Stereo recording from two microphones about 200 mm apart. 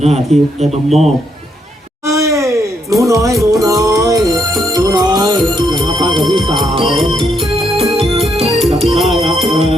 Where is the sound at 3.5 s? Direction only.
15° right (ahead or behind).